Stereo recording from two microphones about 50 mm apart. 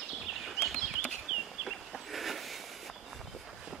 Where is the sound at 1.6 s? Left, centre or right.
Centre.